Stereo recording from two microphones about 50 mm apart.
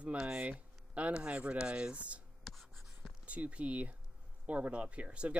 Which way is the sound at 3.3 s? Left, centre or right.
Right.